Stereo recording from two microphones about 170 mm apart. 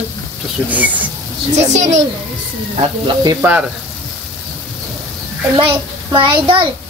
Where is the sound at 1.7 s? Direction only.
45° right (ahead or behind).